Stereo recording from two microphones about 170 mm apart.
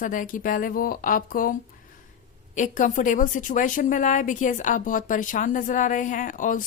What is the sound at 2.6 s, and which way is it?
A woman's voice, 50° left (ahead or behind).